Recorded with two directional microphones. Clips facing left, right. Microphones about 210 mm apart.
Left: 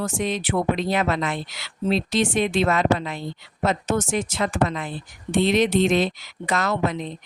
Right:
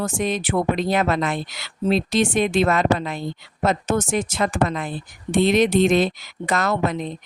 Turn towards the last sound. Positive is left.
turn(degrees=-45)  # may be behind; listen again after turning